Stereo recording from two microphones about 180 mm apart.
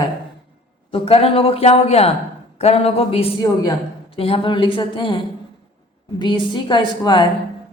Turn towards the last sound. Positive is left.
turn(degrees=25)  # may be behind; listen again after turning